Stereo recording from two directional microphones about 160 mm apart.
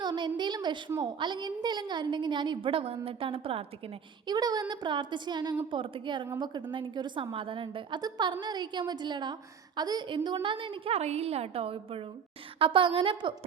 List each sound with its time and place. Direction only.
0.0 s a woman's voice: 25° right (ahead or behind)
4.3 s a woman's voice: 25° right (ahead or behind)